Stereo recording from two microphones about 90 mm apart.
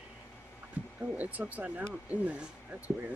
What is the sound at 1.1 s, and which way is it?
Speech, 15° right (ahead or behind).